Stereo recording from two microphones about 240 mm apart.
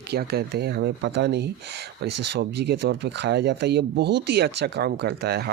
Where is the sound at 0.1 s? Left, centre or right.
Right.